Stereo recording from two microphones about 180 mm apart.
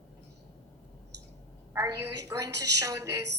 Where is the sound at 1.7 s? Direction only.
15° right (ahead or behind).